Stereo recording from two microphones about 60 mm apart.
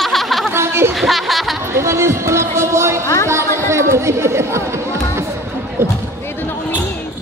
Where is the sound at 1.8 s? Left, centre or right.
Right.